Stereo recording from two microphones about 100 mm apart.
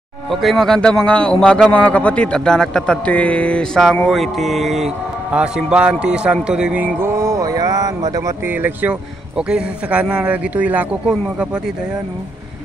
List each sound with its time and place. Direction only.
0.3 s a man's voice: centre (ahead or behind)
4.1 s a man's voice: centre (ahead or behind)
7.0 s mantra: 30° right (ahead or behind)
8.5 s speech: 20° right (ahead or behind)